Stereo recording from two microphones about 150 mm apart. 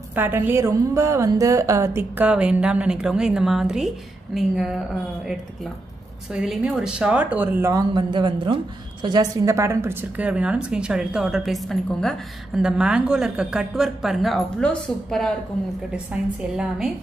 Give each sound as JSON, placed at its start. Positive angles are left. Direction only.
{"t": 0.1, "sound": "a woman's voice", "side_deg": -15}
{"t": 6.3, "sound": "a woman's voice", "side_deg": -5}
{"t": 7.9, "sound": "a woman's voice", "side_deg": -30}